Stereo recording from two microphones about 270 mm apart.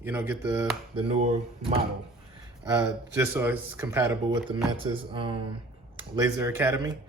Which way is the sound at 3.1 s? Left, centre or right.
Centre.